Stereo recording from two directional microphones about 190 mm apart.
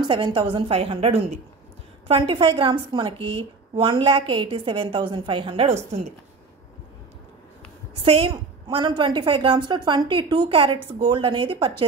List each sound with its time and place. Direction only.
0.0 s a woman's voice: 25° right (ahead or behind)
7.9 s a woman's voice: 30° right (ahead or behind)